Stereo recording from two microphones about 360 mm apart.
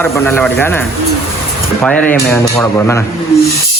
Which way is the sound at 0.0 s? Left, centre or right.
Centre.